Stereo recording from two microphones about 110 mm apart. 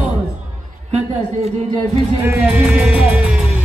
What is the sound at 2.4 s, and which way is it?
Music, 5° right (ahead or behind).